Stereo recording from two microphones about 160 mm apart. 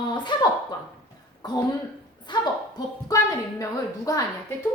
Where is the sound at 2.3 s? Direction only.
25° left (ahead or behind).